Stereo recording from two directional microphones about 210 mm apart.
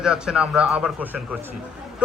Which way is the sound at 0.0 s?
5° right (ahead or behind).